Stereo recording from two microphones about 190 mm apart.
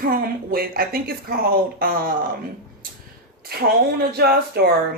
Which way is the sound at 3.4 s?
55° right (ahead or behind).